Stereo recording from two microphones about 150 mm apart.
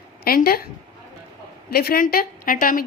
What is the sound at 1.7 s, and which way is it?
A woman's voice, 90° left.